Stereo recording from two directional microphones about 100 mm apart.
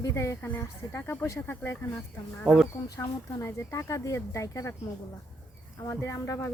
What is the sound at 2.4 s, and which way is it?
Speech, 5° right (ahead or behind).